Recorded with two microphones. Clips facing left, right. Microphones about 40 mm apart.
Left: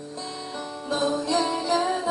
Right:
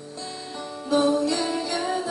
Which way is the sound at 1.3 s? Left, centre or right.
Centre.